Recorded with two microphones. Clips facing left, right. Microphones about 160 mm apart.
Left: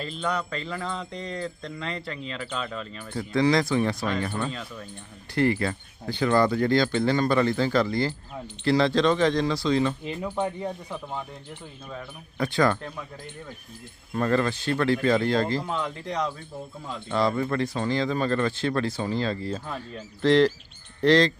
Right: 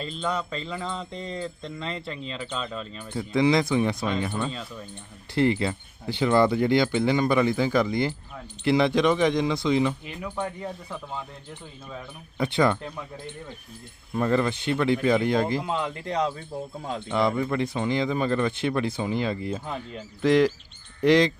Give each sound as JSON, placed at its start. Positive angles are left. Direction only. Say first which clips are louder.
{"t": 0.0, "sound": "speech", "louder": "even", "side_deg": 0}
{"t": 3.3, "sound": "speech", "louder": "right 1 dB", "side_deg": -20}
{"t": 4.3, "sound": "speech", "louder": "even", "side_deg": 0}
{"t": 5.3, "sound": "speech", "louder": "right 1 dB", "side_deg": -20}
{"t": 10.2, "sound": "speech", "louder": "left 3 dB", "side_deg": 10}
{"t": 12.4, "sound": "speech", "louder": "even", "side_deg": -20}
{"t": 14.1, "sound": "speech", "louder": "even", "side_deg": -15}
{"t": 17.1, "sound": "speech", "louder": "even", "side_deg": -15}